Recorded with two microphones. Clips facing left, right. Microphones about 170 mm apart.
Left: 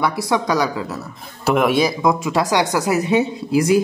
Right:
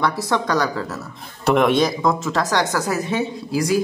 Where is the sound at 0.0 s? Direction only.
15° left (ahead or behind).